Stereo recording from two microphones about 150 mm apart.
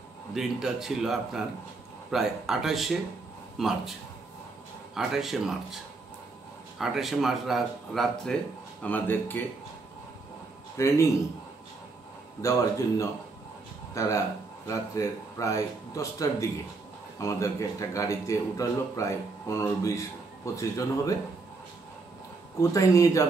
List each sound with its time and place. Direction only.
0.3 s speech: 5° right (ahead or behind)
4.9 s speech: centre (ahead or behind)
6.8 s speech: centre (ahead or behind)
10.8 s speech: 20° left (ahead or behind)
12.4 s speech: 20° left (ahead or behind)
22.6 s speech: 20° left (ahead or behind)